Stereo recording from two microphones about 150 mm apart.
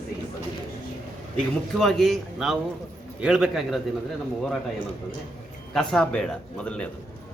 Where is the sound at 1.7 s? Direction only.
5° left (ahead or behind).